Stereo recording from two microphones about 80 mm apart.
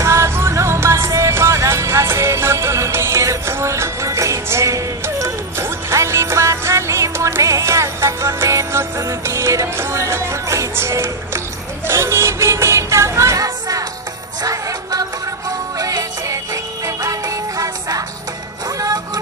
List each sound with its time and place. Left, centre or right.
0.0 s music: right